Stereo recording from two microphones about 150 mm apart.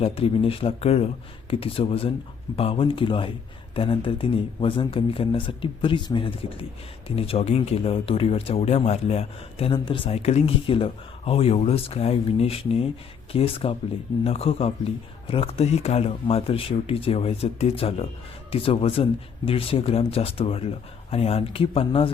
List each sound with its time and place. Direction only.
0.0 s speech: 40° left (ahead or behind)